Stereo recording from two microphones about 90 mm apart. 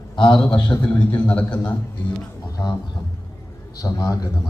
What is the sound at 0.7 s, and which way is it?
A man's voice, 15° left (ahead or behind).